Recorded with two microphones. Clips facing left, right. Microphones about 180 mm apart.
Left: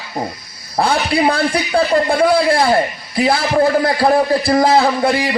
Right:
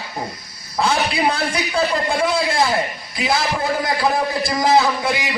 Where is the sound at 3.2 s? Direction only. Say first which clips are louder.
Left 7 dB; 55° left (ahead or behind).